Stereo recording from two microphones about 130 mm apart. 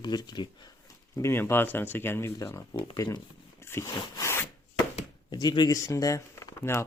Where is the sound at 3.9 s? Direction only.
30° left (ahead or behind).